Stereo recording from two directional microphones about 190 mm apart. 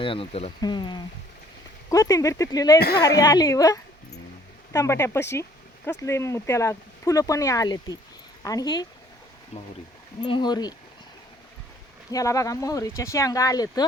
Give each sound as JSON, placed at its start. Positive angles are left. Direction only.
{"t": 0.0, "sound": "speech", "side_deg": 30}
{"t": 2.7, "sound": "a woman's voice", "side_deg": 55}
{"t": 3.2, "sound": "speech", "side_deg": 20}
{"t": 10.2, "sound": "speech", "side_deg": 25}
{"t": 12.1, "sound": "speech", "side_deg": 15}